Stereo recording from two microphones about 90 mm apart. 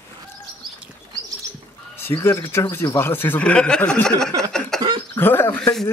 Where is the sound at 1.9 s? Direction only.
25° left (ahead or behind).